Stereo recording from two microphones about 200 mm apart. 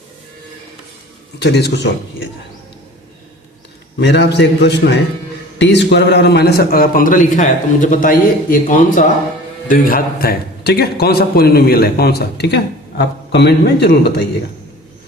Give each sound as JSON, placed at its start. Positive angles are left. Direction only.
{"t": 1.4, "sound": "a man's voice", "side_deg": 55}
{"t": 4.0, "sound": "a man's voice", "side_deg": 60}